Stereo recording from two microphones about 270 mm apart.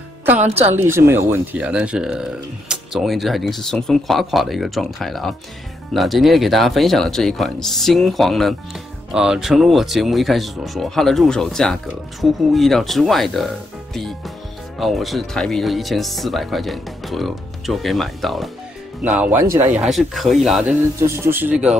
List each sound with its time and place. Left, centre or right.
0.2 s music: centre
0.6 s speech: right
0.8 s speech: centre